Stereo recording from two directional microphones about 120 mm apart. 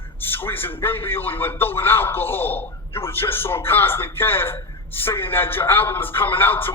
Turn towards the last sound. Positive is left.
turn(degrees=15)  # may be behind; listen again after turning